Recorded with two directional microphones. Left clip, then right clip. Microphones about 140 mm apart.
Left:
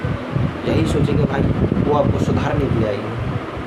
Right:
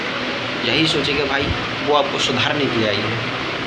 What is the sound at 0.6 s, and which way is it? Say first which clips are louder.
Speech: right 3 dB; 10° left (ahead or behind).